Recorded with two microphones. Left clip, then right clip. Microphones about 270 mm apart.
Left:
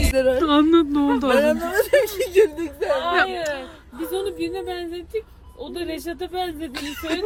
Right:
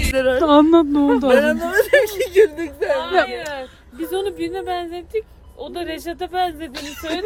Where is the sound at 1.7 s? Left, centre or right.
Centre.